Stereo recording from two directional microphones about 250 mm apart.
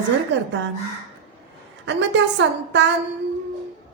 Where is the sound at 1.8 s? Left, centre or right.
Right.